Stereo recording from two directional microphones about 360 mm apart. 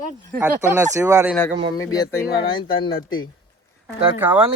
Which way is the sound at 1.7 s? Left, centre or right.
Centre.